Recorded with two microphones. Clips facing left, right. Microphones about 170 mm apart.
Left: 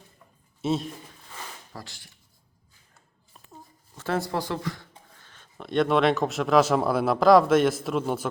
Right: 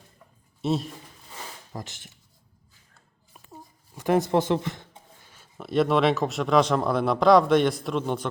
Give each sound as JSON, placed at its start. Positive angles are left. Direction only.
{"t": 0.6, "sound": "speech", "side_deg": 0}
{"t": 1.7, "sound": "speech", "side_deg": -20}
{"t": 3.3, "sound": "speech", "side_deg": -10}